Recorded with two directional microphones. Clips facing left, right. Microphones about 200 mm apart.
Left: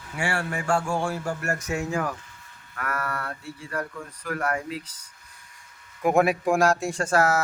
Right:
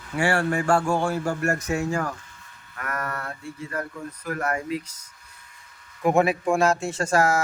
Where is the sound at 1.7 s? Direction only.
45° right (ahead or behind).